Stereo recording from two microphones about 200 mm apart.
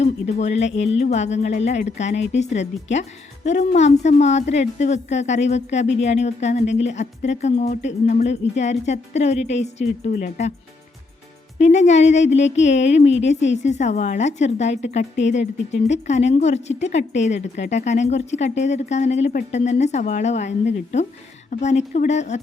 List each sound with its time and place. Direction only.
0.0 s speech: 35° left (ahead or behind)
11.6 s speech: 35° left (ahead or behind)